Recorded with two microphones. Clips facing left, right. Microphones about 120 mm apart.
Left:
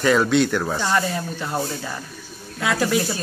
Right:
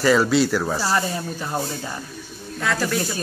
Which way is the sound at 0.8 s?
30° right (ahead or behind).